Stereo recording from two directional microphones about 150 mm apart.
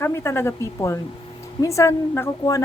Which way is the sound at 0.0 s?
15° left (ahead or behind).